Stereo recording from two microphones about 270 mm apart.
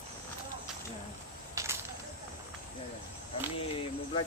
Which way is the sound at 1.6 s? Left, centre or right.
Centre.